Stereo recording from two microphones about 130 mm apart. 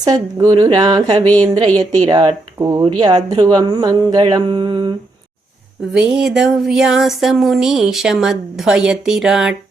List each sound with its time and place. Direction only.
0.0 s a woman's voice: 30° right (ahead or behind)
1.2 s a woman's voice: 10° left (ahead or behind)
2.0 s speech: 35° right (ahead or behind)
5.9 s speech: 5° right (ahead or behind)